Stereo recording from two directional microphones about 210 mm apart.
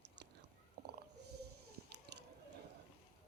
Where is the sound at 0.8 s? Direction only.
45° right (ahead or behind).